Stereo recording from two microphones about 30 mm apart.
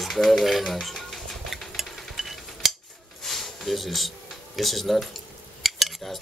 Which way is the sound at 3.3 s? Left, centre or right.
Centre.